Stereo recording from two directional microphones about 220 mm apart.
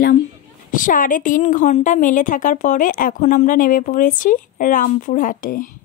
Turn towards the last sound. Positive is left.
turn(degrees=35)  # may be behind; listen again after turning